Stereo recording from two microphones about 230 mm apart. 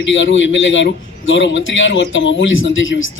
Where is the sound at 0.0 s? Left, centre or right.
Left.